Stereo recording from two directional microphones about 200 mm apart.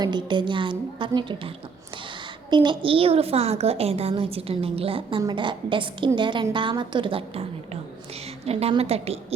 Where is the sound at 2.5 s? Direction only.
25° right (ahead or behind).